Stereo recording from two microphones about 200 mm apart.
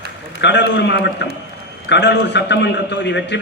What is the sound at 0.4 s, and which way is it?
A man's voice, 60° left (ahead or behind).